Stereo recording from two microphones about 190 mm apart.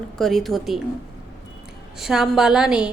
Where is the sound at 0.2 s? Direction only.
Centre (ahead or behind).